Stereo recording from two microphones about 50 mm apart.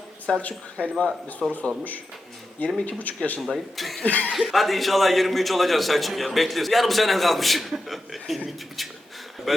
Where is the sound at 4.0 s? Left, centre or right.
Left.